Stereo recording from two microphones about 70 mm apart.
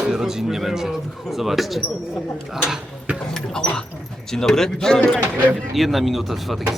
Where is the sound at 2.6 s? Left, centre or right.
Centre.